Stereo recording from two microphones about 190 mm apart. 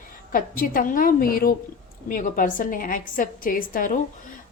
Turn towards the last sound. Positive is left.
turn(degrees=45)  # may be behind; listen again after turning